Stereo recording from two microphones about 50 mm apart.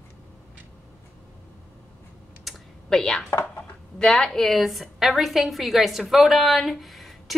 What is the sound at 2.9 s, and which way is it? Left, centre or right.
Speech, centre.